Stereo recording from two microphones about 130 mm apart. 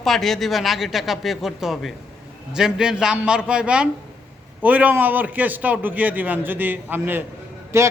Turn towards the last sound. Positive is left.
turn(degrees=-20)  # may be behind; listen again after turning